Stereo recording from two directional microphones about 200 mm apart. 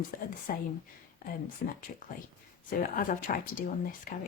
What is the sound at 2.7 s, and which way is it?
A woman's voice, 40° left (ahead or behind).